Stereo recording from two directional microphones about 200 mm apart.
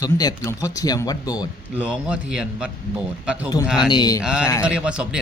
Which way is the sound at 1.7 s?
5° right (ahead or behind).